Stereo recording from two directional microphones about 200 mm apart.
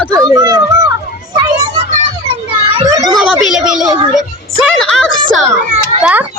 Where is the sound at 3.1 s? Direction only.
Centre (ahead or behind).